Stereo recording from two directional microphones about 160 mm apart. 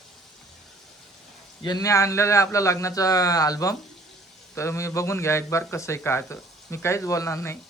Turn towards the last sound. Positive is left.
turn(degrees=15)  # may be behind; listen again after turning